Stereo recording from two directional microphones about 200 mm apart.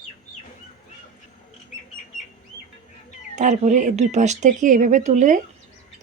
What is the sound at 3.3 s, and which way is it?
Speech, 35° right (ahead or behind).